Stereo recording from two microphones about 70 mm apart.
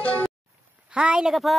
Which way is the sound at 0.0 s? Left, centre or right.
Left.